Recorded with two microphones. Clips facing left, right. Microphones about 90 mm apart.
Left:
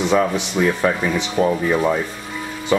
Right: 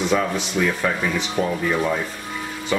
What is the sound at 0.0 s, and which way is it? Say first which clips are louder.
Speech: left 3 dB; 20° left (ahead or behind).